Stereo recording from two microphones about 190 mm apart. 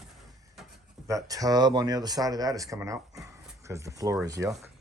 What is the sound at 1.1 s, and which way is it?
Speech, 15° right (ahead or behind).